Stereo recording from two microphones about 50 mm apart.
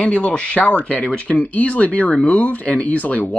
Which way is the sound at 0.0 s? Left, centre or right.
Left.